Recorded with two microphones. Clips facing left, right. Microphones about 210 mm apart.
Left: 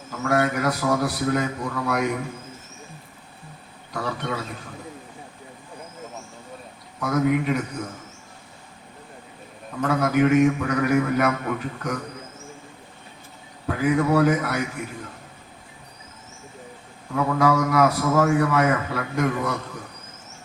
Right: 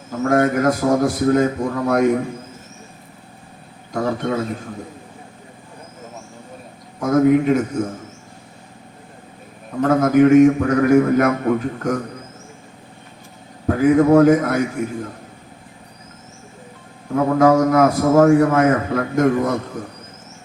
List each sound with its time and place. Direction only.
0.1 s a man's voice: 40° right (ahead or behind)
3.9 s a man's voice: 45° right (ahead or behind)
7.0 s a man's voice: 45° right (ahead or behind)
9.8 s a man's voice: 45° right (ahead or behind)
13.7 s a man's voice: 45° right (ahead or behind)
17.2 s a man's voice: 45° right (ahead or behind)